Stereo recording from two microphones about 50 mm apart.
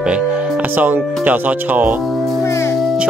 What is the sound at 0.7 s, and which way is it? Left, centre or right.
Speech, right.